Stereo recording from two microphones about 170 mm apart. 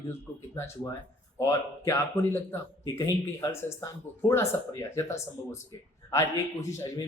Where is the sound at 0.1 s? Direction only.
15° left (ahead or behind).